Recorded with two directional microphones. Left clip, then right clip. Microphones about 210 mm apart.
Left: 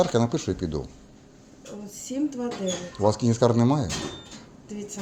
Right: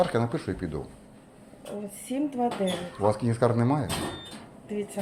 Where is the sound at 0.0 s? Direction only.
45° left (ahead or behind).